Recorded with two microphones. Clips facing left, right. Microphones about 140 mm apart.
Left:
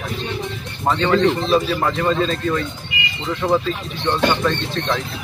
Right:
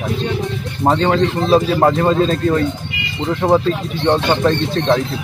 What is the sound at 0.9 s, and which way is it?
Speech, 40° right (ahead or behind).